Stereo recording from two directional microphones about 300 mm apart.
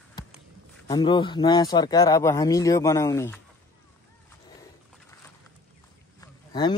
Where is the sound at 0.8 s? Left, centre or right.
Centre.